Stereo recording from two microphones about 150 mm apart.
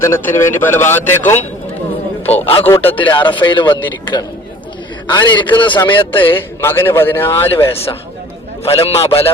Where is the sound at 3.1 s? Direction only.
30° left (ahead or behind).